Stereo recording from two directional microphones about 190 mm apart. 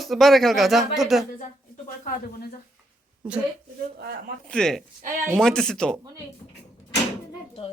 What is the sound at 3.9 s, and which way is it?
Speech, 55° right (ahead or behind).